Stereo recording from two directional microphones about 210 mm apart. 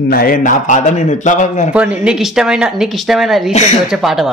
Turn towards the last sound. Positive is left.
turn(degrees=0)  # may be behind; listen again after turning